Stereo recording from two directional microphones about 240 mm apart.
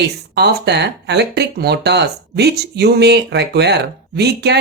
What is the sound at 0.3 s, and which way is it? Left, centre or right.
Speech, right.